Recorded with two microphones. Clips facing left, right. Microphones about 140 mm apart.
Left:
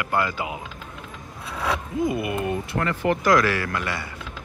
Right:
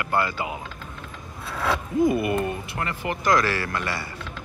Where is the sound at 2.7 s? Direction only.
50° left (ahead or behind).